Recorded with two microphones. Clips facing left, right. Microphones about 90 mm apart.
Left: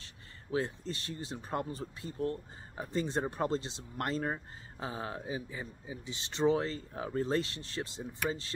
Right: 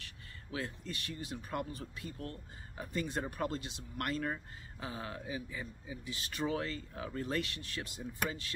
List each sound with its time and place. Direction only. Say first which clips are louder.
0.0 s speech: right 1 dB; 30° left (ahead or behind)